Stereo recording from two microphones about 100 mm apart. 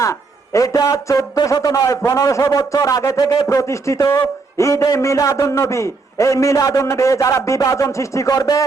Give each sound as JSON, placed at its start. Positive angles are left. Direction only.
{"t": 0.0, "sound": "a man's voice", "side_deg": 30}